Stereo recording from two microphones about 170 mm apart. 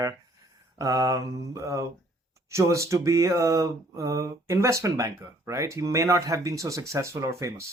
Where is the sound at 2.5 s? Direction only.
15° right (ahead or behind).